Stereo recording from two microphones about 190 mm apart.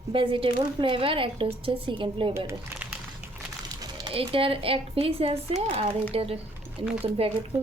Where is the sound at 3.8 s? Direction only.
25° right (ahead or behind).